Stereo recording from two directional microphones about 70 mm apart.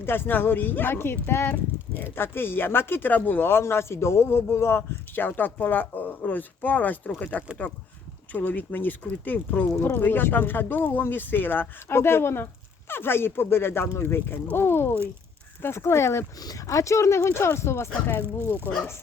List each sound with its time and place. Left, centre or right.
0.0 s speech: left
16.4 s speech: left
16.6 s speech: left